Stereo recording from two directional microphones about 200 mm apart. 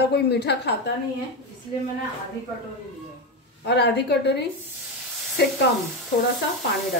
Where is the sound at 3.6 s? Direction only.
55° left (ahead or behind).